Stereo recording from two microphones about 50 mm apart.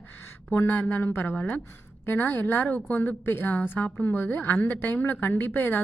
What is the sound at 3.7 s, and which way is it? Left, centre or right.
Speech, left.